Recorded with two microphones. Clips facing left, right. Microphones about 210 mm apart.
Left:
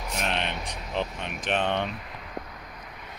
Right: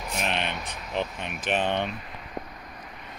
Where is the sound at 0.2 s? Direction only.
5° right (ahead or behind).